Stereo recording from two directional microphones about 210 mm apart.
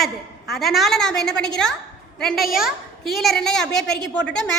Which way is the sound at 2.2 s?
Centre (ahead or behind).